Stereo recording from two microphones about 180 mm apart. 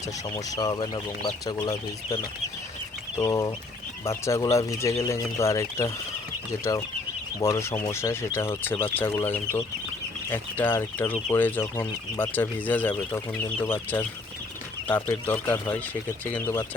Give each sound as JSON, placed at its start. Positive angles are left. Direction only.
{"t": 0.3, "sound": "speech", "side_deg": 20}
{"t": 3.2, "sound": "speech", "side_deg": 20}